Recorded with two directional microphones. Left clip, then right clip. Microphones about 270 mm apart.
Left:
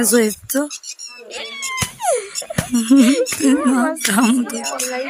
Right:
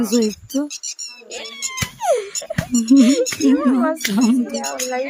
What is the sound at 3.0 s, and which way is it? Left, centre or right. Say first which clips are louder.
Speech: even; centre.